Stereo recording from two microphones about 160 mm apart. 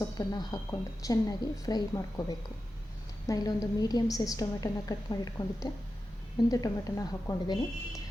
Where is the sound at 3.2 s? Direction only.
20° left (ahead or behind).